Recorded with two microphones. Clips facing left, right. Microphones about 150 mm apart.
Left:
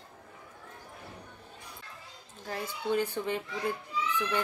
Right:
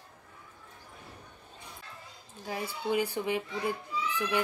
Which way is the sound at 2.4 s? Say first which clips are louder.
Right 1 dB; 10° right (ahead or behind).